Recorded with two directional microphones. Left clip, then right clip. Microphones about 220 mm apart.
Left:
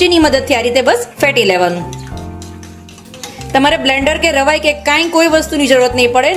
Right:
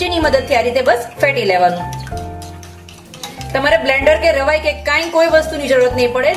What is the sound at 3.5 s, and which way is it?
A woman's voice, 40° left (ahead or behind).